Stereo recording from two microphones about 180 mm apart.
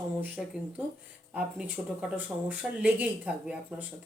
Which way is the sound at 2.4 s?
10° right (ahead or behind).